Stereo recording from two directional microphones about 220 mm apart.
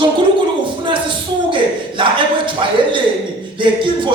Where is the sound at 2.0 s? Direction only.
20° right (ahead or behind).